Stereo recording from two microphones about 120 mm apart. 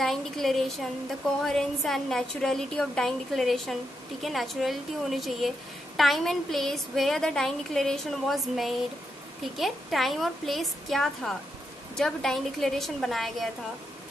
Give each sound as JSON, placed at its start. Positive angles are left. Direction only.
{"t": 0.0, "sound": "a woman's voice", "side_deg": 5}